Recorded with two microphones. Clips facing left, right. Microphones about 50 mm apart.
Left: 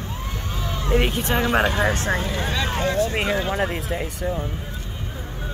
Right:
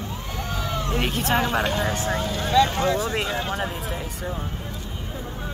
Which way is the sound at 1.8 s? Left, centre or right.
Left.